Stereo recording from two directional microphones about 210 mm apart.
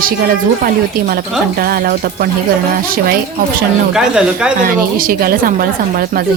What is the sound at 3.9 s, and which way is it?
Speech, 5° right (ahead or behind).